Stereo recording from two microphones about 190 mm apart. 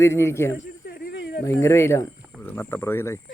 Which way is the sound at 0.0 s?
15° left (ahead or behind).